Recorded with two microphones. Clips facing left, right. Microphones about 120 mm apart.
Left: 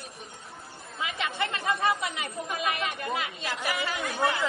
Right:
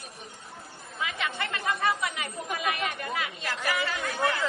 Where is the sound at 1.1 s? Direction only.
25° left (ahead or behind).